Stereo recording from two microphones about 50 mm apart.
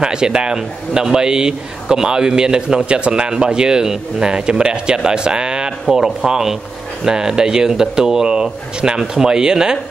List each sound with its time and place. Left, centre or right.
0.0 s a man's voice: centre